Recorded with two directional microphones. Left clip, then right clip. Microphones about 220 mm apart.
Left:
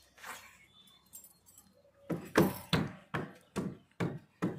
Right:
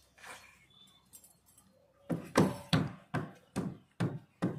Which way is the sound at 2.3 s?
30° right (ahead or behind).